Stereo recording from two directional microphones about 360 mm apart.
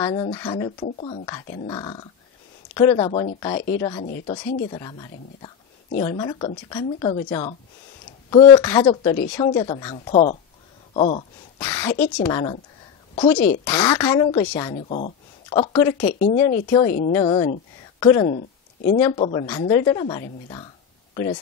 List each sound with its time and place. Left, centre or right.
0.0 s a woman's voice: centre
4.7 s a woman's voice: centre
16.0 s speech: left